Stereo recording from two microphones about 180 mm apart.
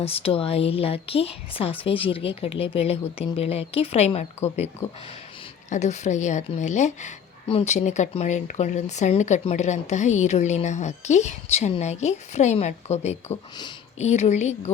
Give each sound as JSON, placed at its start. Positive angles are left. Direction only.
{"t": 0.0, "sound": "speech", "side_deg": 35}
{"t": 5.6, "sound": "speech", "side_deg": 40}